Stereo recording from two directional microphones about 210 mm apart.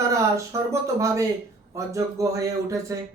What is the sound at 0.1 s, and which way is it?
Speech, 15° right (ahead or behind).